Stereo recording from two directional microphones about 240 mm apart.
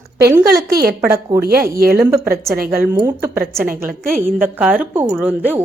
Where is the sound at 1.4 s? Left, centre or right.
Right.